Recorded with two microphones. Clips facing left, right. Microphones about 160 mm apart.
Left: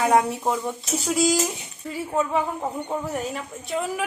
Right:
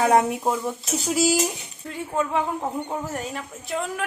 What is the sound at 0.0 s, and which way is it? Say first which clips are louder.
Speech: right 1 dB; 30° right (ahead or behind).